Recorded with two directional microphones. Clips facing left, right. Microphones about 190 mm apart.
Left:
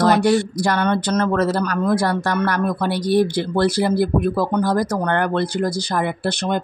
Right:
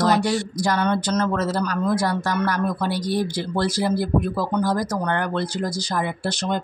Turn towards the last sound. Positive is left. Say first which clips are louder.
# left 3 dB
turn(degrees=60)  # may be behind; listen again after turning